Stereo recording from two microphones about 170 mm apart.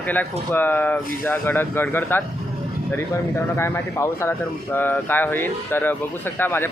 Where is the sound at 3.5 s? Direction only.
15° left (ahead or behind).